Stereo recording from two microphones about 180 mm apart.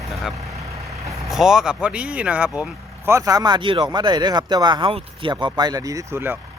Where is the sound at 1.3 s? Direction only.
5° right (ahead or behind).